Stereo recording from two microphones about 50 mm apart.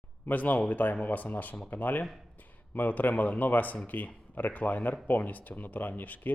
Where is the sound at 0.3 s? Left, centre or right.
Left.